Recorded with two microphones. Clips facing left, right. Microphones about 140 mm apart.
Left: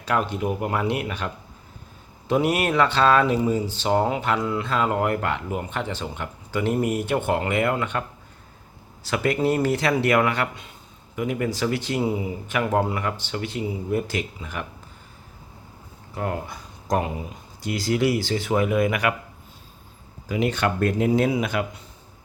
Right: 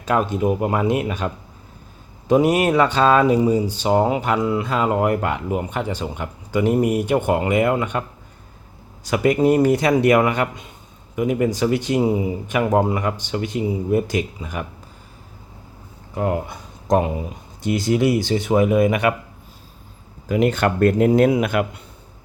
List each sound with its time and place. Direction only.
0.1 s speech: 25° right (ahead or behind)
2.2 s speech: 40° right (ahead or behind)
2.5 s speech: 15° right (ahead or behind)
9.0 s speech: 15° right (ahead or behind)
16.1 s speech: 20° right (ahead or behind)
20.2 s speech: 50° right (ahead or behind)